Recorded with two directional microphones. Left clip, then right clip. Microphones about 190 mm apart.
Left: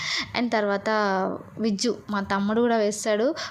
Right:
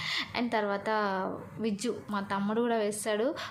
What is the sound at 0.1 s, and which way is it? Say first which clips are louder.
A woman's voice: left 6 dB; 30° left (ahead or behind).